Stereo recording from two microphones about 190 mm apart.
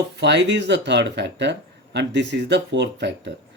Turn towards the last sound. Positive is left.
turn(degrees=-65)  # may be behind; listen again after turning